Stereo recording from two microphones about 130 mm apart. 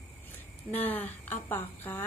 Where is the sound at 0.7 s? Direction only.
15° left (ahead or behind).